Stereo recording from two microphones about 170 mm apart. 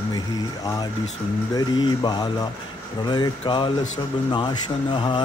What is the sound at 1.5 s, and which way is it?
Speech, 25° left (ahead or behind).